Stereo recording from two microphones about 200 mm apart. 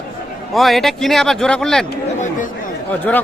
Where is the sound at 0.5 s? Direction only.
Centre (ahead or behind).